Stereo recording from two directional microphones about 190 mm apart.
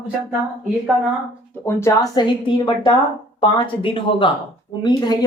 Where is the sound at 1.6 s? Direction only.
15° left (ahead or behind).